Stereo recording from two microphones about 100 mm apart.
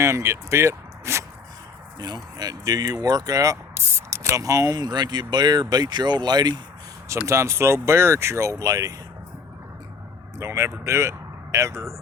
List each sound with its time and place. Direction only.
0.0 s speech: 30° right (ahead or behind)
2.0 s speech: 45° right (ahead or behind)
7.1 s speech: 30° right (ahead or behind)
10.3 s speech: 30° right (ahead or behind)